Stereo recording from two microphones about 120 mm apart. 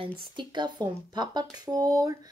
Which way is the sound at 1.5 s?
35° right (ahead or behind).